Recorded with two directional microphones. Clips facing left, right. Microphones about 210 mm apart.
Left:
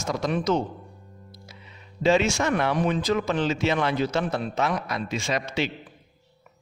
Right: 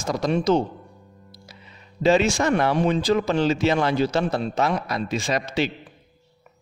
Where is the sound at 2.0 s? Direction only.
35° right (ahead or behind).